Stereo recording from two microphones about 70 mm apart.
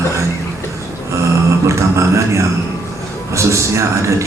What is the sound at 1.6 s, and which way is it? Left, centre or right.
A man's voice, right.